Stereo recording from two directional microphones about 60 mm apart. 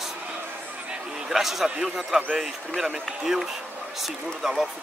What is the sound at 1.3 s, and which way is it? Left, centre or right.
Speech, centre.